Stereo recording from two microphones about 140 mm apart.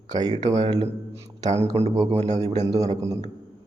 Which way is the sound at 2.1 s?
50° right (ahead or behind).